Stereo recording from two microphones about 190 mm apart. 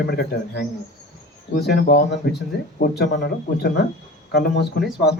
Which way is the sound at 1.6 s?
55° left (ahead or behind).